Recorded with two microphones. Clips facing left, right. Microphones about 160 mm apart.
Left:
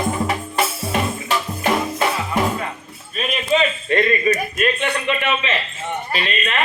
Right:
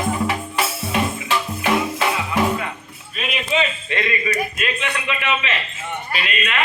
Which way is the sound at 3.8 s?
40° left (ahead or behind).